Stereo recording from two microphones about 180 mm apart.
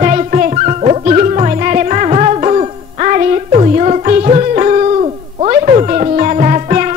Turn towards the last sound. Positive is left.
turn(degrees=-40)  # may be behind; listen again after turning